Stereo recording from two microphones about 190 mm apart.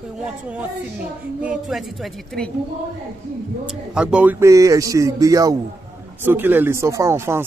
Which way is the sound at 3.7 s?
5° right (ahead or behind).